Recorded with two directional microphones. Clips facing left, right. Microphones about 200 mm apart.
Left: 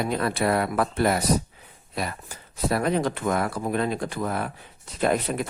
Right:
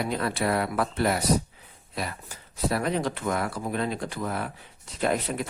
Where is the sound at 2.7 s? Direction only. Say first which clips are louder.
Left 4 dB; 50° left (ahead or behind).